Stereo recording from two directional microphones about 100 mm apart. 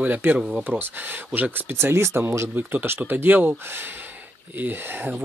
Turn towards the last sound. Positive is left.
turn(degrees=-20)  # may be behind; listen again after turning